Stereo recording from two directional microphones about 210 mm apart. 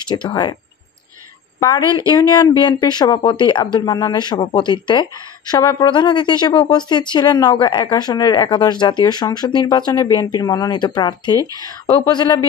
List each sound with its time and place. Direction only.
0.1 s speech: 20° left (ahead or behind)
1.6 s speech: 20° left (ahead or behind)